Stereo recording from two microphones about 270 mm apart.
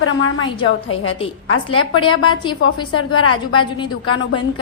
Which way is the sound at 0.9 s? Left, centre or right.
Centre.